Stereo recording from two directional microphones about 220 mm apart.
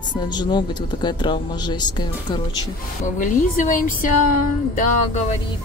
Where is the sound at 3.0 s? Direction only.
35° left (ahead or behind).